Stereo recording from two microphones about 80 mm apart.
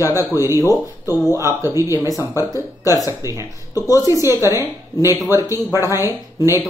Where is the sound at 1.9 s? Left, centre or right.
Left.